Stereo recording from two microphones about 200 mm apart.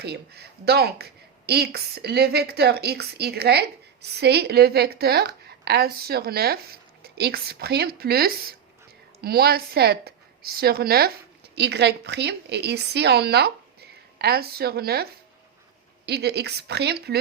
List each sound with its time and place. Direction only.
0.0 s a woman's voice: 55° right (ahead or behind)
16.0 s a woman's voice: 55° right (ahead or behind)